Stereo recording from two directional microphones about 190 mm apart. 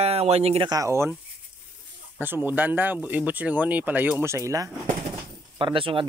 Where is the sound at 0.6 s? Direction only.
15° right (ahead or behind).